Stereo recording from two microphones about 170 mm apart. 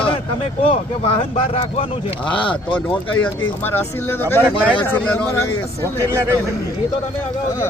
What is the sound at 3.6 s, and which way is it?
Speech, 15° left (ahead or behind).